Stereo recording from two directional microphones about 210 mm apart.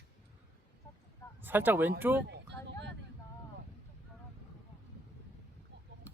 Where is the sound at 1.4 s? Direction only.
10° right (ahead or behind).